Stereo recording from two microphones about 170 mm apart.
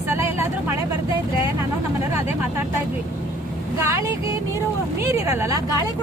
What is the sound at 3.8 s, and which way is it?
Speech, 15° right (ahead or behind).